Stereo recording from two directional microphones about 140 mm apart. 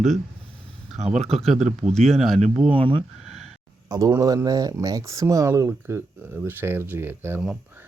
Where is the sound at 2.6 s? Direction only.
40° right (ahead or behind).